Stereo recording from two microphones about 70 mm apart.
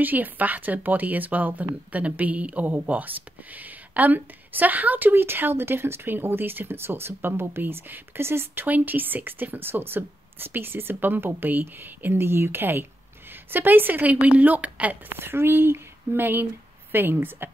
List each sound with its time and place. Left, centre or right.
0.0 s speech: right
8.6 s a woman's voice: right